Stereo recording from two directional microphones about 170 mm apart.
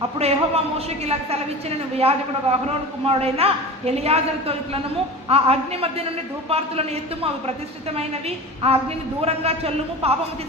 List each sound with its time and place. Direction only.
0.2 s a woman's voice: 35° right (ahead or behind)
8.6 s a woman's voice: 35° right (ahead or behind)